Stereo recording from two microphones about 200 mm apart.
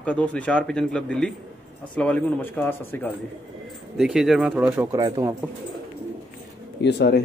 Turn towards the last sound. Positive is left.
turn(degrees=55)  # may be behind; listen again after turning